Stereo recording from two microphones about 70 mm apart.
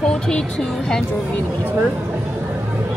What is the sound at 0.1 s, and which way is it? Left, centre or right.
Speech, centre.